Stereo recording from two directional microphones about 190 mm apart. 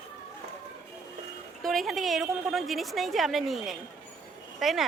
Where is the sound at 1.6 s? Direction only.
Centre (ahead or behind).